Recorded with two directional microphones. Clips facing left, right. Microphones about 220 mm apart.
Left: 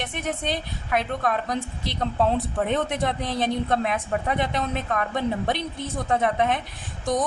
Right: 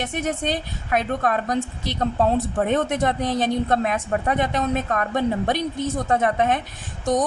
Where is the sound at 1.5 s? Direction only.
45° right (ahead or behind).